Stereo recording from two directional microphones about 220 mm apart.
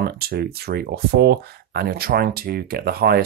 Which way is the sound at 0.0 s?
45° right (ahead or behind).